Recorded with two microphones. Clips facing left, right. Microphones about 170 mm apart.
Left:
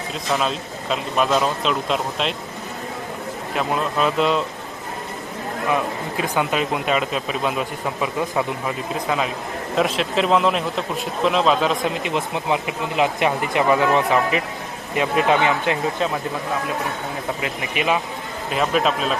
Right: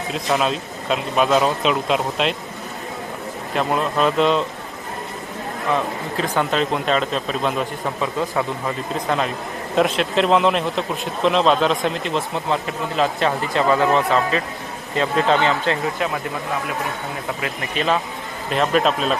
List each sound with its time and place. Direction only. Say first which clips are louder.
0.1 s a man's voice: right 2 dB; centre (ahead or behind)
3.5 s a man's voice: right 2 dB; centre (ahead or behind)
5.7 s speech: right 2 dB; 10° left (ahead or behind)
9.0 s a man's voice: right 1 dB; 5° left (ahead or behind)
12.0 s speech: even; 15° left (ahead or behind)
17.4 s speech: right 1 dB; 15° left (ahead or behind)
18.5 s a man's voice: right 2 dB; centre (ahead or behind)